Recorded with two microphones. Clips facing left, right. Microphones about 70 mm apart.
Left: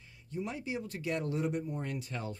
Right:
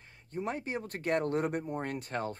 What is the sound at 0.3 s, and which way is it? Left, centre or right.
Speech, right.